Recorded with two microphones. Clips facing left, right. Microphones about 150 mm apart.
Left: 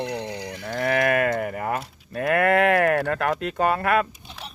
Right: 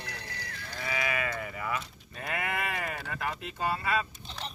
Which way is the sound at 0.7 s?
55° left (ahead or behind).